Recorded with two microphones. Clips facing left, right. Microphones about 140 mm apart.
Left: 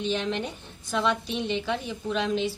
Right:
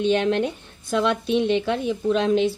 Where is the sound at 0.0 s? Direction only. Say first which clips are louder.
Right 8 dB; 60° right (ahead or behind).